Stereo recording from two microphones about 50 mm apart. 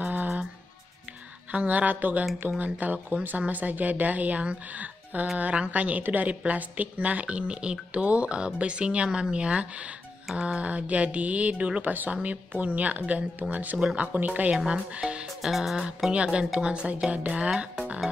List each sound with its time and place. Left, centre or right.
0.0 s music: right
1.5 s a woman's voice: right
11.8 s a woman's voice: right
15.4 s music: centre
16.1 s speech: right